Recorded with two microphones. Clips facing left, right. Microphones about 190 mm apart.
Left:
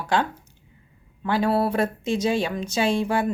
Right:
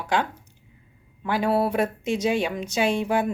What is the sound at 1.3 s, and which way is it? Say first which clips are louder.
A woman's voice: left 1 dB; 15° right (ahead or behind).